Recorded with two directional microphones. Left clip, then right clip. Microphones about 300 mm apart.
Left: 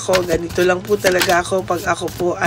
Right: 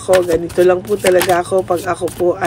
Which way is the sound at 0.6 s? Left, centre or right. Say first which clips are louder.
Right 3 dB; centre.